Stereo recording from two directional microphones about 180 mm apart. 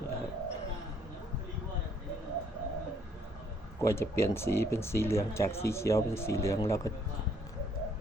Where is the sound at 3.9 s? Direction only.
15° left (ahead or behind).